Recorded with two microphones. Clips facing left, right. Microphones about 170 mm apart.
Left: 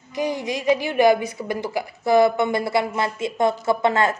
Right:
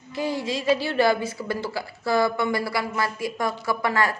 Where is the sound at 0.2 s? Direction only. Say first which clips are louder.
Left 2 dB; 20° left (ahead or behind).